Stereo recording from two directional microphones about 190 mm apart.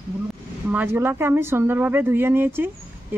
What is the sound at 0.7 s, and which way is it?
Speech, 10° right (ahead or behind).